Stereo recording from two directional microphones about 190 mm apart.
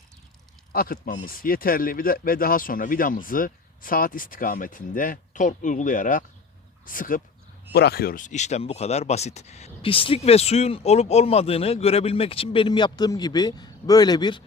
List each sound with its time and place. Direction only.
0.7 s speech: 50° left (ahead or behind)
7.7 s speech: 60° left (ahead or behind); by 14.4 s 25° left (ahead or behind)